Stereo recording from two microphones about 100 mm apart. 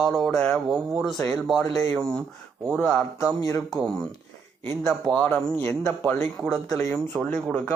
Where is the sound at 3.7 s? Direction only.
5° left (ahead or behind).